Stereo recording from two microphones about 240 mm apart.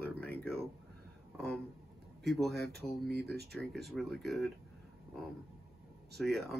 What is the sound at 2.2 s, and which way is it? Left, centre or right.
Speech, centre.